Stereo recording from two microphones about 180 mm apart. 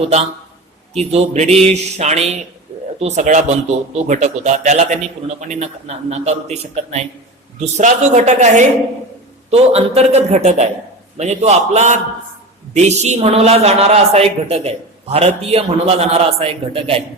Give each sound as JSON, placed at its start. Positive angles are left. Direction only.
{"t": 0.9, "sound": "a man's voice", "side_deg": -35}